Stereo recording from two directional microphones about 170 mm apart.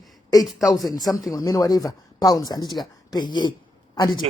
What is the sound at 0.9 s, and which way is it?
A woman's voice, 20° left (ahead or behind).